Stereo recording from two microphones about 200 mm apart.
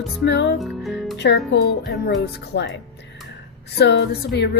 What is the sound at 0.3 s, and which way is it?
Speech, 60° left (ahead or behind).